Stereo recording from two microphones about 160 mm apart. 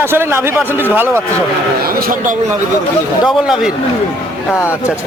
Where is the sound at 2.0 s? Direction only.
65° right (ahead or behind).